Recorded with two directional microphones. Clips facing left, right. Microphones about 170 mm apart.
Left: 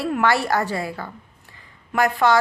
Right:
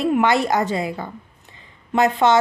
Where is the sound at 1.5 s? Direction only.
20° right (ahead or behind).